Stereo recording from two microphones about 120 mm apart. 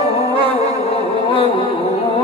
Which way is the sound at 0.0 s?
55° left (ahead or behind).